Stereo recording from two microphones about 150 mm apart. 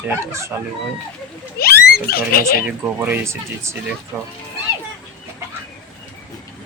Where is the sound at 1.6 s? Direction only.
90° left.